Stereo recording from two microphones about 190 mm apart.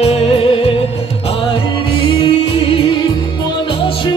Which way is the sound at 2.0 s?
25° left (ahead or behind).